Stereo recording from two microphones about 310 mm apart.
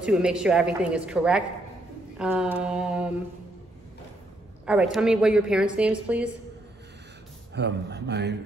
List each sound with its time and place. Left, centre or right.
0.0 s a woman's voice: centre
2.1 s mantra: centre
4.6 s a woman's voice: centre
7.5 s speech: right